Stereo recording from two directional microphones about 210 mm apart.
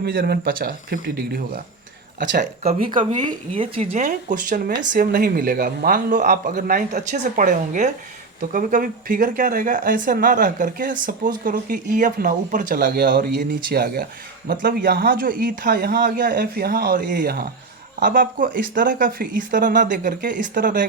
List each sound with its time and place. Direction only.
0.0 s speech: 45° right (ahead or behind)
2.3 s speech: 35° right (ahead or behind)
3.2 s speech: 25° right (ahead or behind)